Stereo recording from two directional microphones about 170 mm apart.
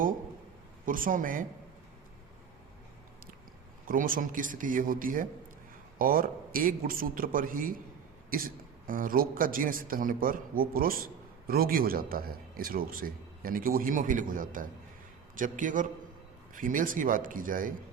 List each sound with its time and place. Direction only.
0.9 s a man's voice: 55° right (ahead or behind)
3.8 s a man's voice: 55° right (ahead or behind)